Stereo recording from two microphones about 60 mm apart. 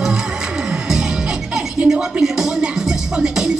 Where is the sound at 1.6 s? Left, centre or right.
Centre.